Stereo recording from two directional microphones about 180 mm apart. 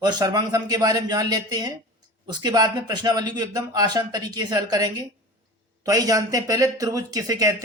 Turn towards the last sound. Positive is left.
turn(degrees=-20)  # may be behind; listen again after turning